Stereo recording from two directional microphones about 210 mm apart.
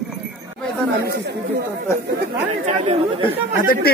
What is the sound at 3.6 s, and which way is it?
Speech, 40° left (ahead or behind).